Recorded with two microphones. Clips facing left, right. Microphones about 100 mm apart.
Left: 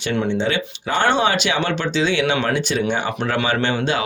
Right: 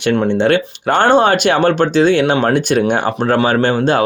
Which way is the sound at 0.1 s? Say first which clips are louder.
Right 7 dB; 55° right (ahead or behind).